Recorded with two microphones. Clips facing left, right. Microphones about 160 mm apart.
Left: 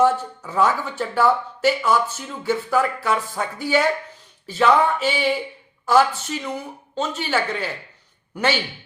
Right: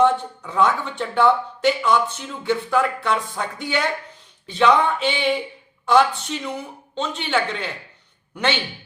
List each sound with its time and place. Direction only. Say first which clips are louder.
0.0 s speech: even; 5° left (ahead or behind)